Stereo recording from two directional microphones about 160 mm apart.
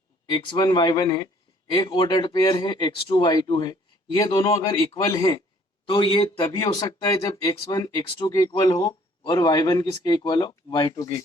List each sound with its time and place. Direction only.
0.3 s speech: 30° left (ahead or behind)